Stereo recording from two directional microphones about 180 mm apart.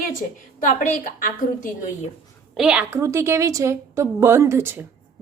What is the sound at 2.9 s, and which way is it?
A woman's voice, 15° right (ahead or behind).